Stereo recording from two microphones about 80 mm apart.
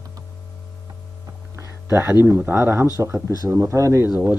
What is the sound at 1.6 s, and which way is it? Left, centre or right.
Speech, right.